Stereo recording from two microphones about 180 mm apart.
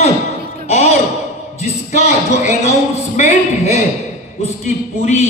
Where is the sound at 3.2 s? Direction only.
40° left (ahead or behind).